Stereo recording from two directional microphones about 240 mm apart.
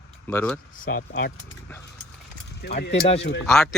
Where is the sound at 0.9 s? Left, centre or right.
Left.